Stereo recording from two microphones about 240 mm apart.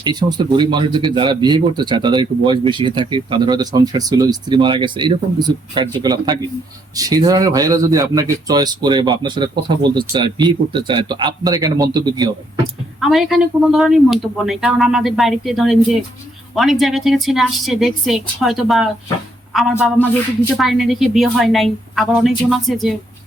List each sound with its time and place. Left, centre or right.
0.0 s speech: centre
13.0 s speech: centre
20.6 s speech: centre